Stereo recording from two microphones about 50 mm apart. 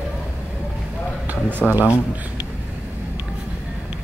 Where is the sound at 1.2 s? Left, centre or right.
Right.